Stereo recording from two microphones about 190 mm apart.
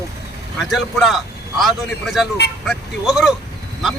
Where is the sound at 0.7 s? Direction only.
Centre (ahead or behind).